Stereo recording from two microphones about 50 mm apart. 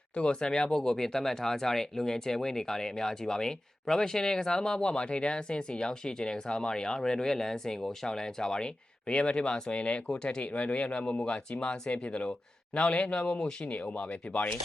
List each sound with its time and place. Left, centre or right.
0.2 s speech: centre